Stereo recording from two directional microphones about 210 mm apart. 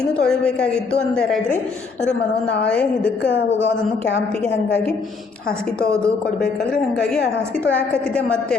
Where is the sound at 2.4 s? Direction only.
50° left (ahead or behind).